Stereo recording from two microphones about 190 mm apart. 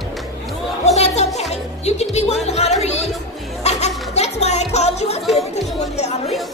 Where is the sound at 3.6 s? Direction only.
35° left (ahead or behind).